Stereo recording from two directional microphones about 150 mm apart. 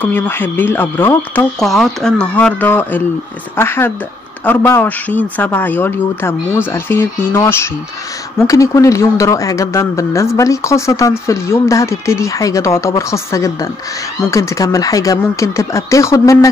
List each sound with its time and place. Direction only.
0.0 s a man's voice: 15° left (ahead or behind)
1.6 s a man's voice: centre (ahead or behind); by 16.4 s 20° left (ahead or behind)